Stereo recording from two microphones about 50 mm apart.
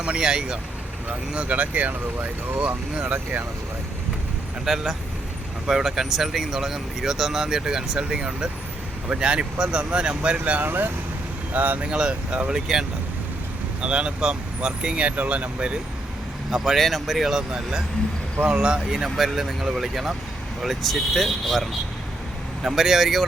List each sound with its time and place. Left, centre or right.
0.0 s speech: centre
4.6 s speech: centre; by 10.6 s right
10.6 s speech: right
11.9 s speech: right
13.8 s speech: right
16.5 s speech: centre